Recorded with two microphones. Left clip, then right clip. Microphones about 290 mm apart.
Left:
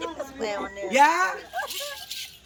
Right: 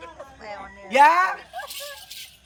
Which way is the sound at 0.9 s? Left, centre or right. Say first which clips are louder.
Right 4 dB; centre.